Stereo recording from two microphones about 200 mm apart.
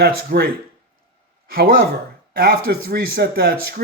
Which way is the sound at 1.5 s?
50° right (ahead or behind).